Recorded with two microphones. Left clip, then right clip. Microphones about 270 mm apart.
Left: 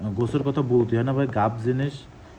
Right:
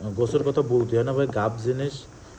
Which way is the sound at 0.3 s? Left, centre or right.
Left.